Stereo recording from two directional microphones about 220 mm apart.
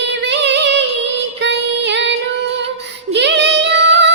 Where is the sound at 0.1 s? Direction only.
50° right (ahead or behind).